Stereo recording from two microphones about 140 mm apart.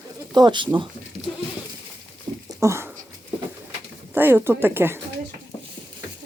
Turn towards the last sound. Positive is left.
turn(degrees=-15)  # may be behind; listen again after turning